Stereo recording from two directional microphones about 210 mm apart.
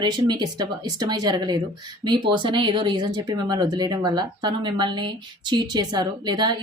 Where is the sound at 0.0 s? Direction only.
20° right (ahead or behind).